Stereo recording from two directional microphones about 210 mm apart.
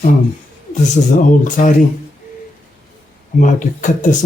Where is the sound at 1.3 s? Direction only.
35° left (ahead or behind).